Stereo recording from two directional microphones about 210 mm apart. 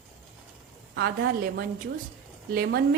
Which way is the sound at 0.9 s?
50° right (ahead or behind).